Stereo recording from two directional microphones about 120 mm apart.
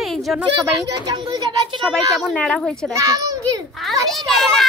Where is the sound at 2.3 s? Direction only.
10° left (ahead or behind).